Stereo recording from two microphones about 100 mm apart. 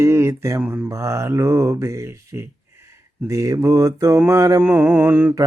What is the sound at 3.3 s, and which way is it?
Mantra, 30° right (ahead or behind).